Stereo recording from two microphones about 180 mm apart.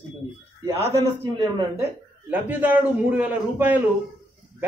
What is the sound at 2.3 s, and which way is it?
Speech, 10° right (ahead or behind).